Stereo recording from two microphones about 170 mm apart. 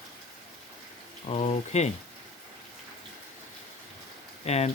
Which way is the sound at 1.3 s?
40° left (ahead or behind).